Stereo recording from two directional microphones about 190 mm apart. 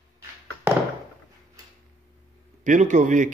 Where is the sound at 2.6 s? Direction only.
40° right (ahead or behind).